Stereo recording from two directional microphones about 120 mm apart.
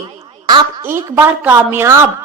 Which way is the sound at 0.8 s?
20° right (ahead or behind).